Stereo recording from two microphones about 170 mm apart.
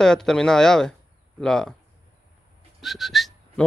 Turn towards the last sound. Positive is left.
turn(degrees=0)  # may be behind; listen again after turning